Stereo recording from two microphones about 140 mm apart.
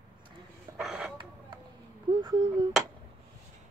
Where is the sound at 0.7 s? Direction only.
5° right (ahead or behind).